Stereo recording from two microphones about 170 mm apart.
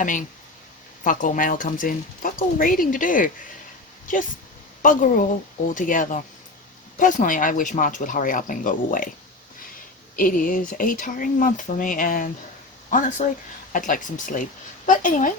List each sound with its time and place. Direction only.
0.0 s speech: 50° left (ahead or behind)
5.7 s speech: 50° left (ahead or behind)
10.2 s speech: 55° left (ahead or behind)